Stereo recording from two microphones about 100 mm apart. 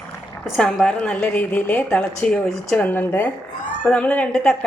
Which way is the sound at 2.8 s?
20° left (ahead or behind).